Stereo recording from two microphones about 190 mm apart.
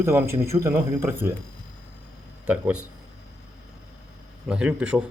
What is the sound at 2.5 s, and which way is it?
Speech, 5° right (ahead or behind).